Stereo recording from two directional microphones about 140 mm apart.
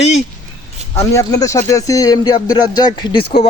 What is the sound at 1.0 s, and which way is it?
A man's voice, 20° left (ahead or behind).